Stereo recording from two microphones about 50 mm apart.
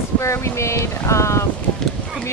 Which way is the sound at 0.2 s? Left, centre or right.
Left.